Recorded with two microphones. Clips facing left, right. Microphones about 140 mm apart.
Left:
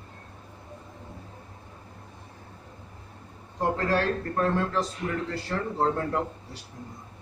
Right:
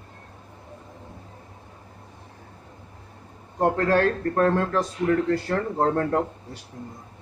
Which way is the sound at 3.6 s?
55° right (ahead or behind).